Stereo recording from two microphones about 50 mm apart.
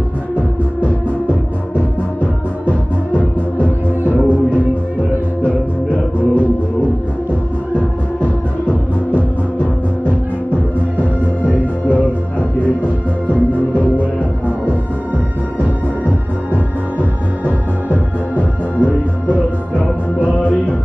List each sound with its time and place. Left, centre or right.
0.4 s music: left
2.6 s music: left
5.9 s music: left
8.2 s music: left
11.4 s music: left
17.0 s music: right
17.9 s music: left